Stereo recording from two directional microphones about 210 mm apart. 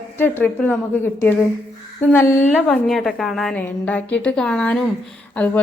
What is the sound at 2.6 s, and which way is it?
A woman's voice, centre (ahead or behind).